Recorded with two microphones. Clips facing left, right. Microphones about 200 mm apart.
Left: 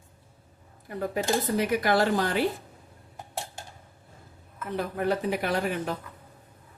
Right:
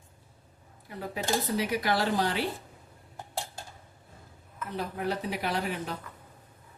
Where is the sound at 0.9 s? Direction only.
50° left (ahead or behind).